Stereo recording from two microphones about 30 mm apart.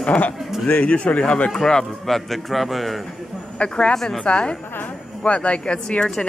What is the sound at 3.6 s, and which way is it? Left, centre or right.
Speech, left.